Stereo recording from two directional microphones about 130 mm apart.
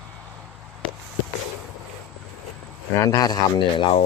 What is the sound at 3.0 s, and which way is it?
Speech, 25° left (ahead or behind).